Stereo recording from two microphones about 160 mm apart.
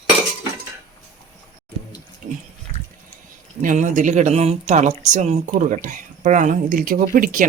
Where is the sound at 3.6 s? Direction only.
55° right (ahead or behind).